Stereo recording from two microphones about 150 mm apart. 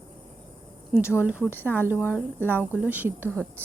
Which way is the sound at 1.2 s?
10° right (ahead or behind).